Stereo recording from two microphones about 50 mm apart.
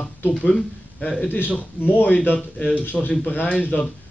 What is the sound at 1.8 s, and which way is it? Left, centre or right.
Speech, left.